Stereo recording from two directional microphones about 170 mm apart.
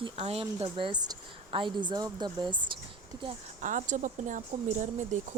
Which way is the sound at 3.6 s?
45° right (ahead or behind).